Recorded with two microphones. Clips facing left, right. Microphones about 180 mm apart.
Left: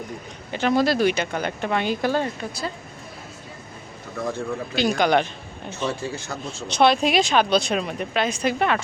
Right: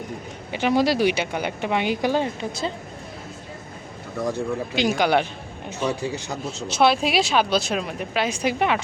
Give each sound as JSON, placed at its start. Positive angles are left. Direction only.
{"t": 0.5, "sound": "speech", "side_deg": -15}
{"t": 4.2, "sound": "speech", "side_deg": -15}
{"t": 6.7, "sound": "speech", "side_deg": -5}